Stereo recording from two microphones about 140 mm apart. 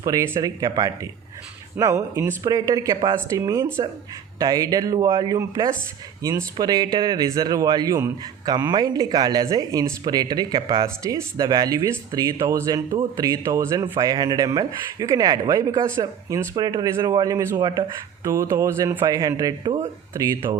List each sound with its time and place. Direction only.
0.0 s speech: 25° right (ahead or behind)